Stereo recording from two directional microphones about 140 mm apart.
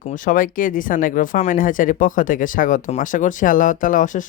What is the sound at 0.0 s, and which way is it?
Speech, 70° left (ahead or behind).